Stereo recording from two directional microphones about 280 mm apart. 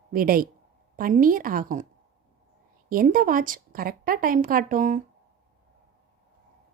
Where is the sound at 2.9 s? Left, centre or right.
Right.